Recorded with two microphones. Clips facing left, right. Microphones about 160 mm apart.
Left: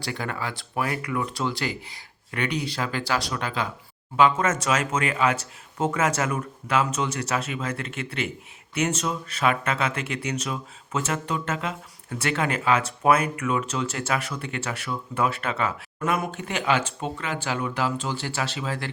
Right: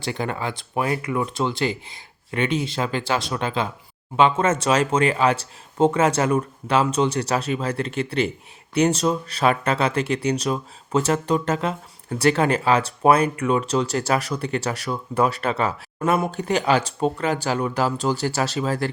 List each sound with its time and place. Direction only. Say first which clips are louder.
0.0 s speech: right 4 dB; 25° right (ahead or behind); by 18.9 s 40° right (ahead or behind)